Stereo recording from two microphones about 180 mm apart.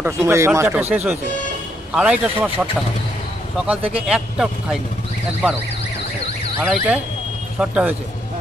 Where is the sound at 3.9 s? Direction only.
5° right (ahead or behind).